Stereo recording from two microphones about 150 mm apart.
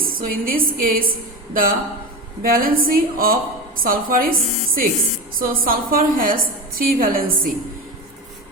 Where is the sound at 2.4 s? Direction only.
70° right (ahead or behind).